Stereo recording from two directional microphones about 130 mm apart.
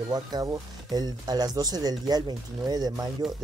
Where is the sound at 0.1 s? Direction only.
30° right (ahead or behind).